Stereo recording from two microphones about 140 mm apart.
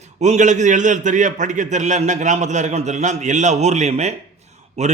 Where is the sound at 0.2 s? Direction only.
60° right (ahead or behind).